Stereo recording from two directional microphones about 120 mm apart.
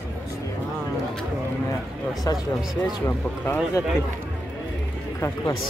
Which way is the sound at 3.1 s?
20° left (ahead or behind).